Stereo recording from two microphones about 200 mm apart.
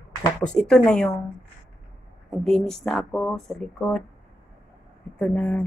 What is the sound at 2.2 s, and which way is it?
Music, 5° left (ahead or behind).